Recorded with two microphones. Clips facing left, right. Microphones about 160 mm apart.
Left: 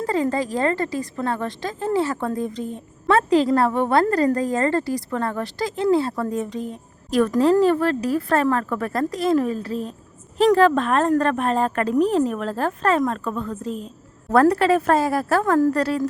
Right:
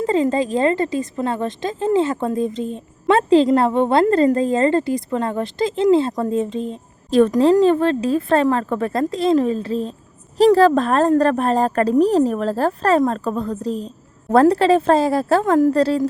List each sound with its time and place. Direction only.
0.0 s a woman's voice: 20° right (ahead or behind)